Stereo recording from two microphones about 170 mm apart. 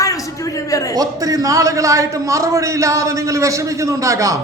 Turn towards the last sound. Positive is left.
turn(degrees=-20)  # may be behind; listen again after turning